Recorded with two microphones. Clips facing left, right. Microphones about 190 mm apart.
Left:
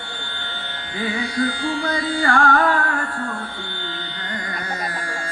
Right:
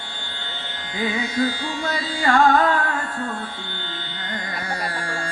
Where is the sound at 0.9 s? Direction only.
20° right (ahead or behind).